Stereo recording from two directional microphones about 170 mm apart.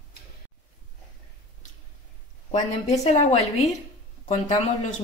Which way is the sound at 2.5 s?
40° left (ahead or behind).